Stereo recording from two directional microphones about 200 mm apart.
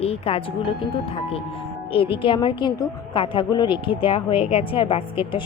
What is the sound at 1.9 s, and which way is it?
A woman's voice, 25° left (ahead or behind).